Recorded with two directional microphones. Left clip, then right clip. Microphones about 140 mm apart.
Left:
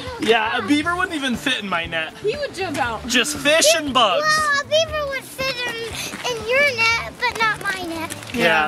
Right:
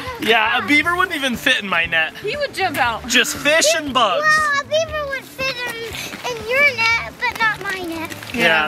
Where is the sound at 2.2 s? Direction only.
30° right (ahead or behind).